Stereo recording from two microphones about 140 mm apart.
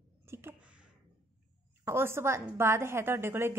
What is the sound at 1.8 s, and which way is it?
A woman's voice, 20° right (ahead or behind).